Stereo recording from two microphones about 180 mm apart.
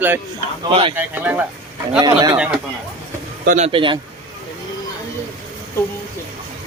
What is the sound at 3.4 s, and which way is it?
Speech, 45° right (ahead or behind).